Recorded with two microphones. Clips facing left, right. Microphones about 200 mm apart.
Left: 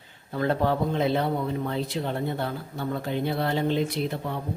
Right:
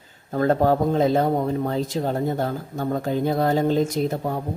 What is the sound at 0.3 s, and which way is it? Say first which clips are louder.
A man's voice: right 6 dB; 45° right (ahead or behind).